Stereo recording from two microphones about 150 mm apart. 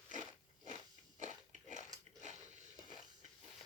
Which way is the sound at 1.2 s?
55° right (ahead or behind).